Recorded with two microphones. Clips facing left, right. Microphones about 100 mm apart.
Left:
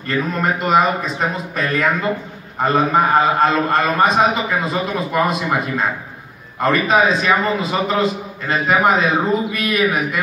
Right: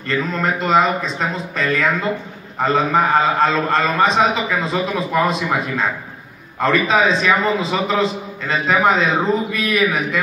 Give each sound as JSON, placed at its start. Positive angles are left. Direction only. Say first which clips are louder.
{"t": 0.2, "sound": "a man's voice", "louder": "left 3 dB", "side_deg": 15}